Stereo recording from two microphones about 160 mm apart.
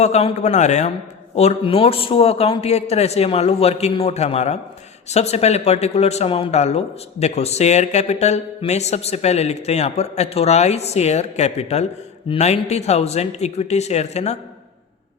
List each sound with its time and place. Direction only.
0.0 s a man's voice: 40° left (ahead or behind)